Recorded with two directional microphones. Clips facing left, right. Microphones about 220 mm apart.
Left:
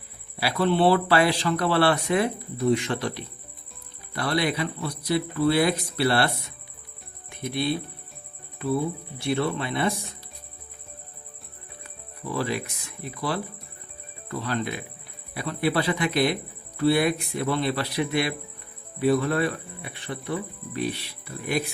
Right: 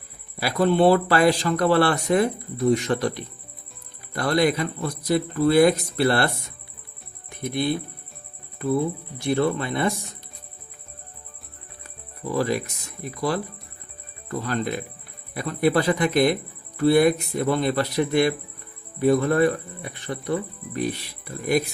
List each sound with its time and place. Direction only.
0.3 s speech: 45° right (ahead or behind)
7.3 s music: 45° right (ahead or behind)
9.2 s speech: 45° right (ahead or behind)
12.3 s speech: 40° right (ahead or behind)
14.3 s speech: 45° right (ahead or behind)